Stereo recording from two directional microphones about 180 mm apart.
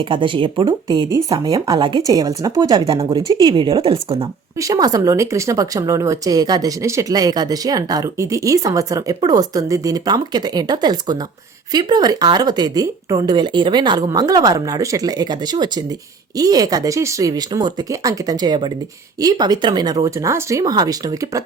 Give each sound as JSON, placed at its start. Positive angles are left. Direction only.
{"t": 0.0, "sound": "speech", "side_deg": -30}
{"t": 4.5, "sound": "speech", "side_deg": -20}